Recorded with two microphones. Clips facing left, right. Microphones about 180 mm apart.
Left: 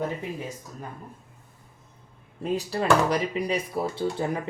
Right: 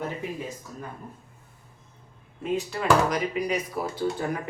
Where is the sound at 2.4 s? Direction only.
35° left (ahead or behind).